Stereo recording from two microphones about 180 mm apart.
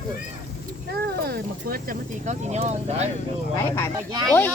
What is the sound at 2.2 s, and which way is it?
Speech, 40° right (ahead or behind).